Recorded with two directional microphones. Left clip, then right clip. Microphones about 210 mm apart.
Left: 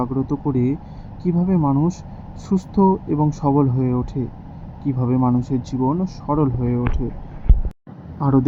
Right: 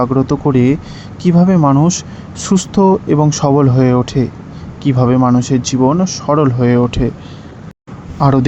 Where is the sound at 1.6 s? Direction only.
35° right (ahead or behind).